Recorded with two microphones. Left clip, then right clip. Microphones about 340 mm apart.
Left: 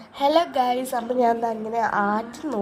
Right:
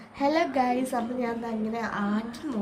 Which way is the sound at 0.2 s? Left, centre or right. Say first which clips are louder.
Left 5 dB; centre.